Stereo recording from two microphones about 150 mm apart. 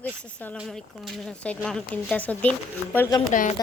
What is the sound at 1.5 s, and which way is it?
Speech, 5° left (ahead or behind).